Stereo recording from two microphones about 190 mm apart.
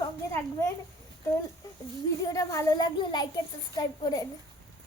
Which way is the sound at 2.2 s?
20° left (ahead or behind).